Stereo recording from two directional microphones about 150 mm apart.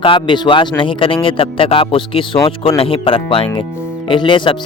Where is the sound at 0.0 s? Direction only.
35° left (ahead or behind).